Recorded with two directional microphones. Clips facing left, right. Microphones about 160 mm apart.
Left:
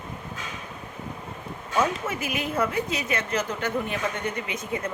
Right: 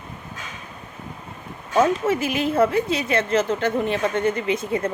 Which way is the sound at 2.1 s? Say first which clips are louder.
Right 7 dB; 30° right (ahead or behind).